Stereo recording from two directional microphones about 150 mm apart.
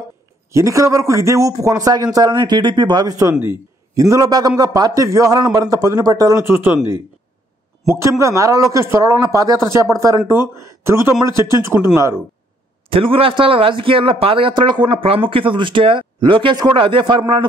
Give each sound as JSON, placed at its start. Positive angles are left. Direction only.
{"t": 0.5, "sound": "a man's voice", "side_deg": -20}
{"t": 7.9, "sound": "a man's voice", "side_deg": -20}
{"t": 12.9, "sound": "a man's voice", "side_deg": -35}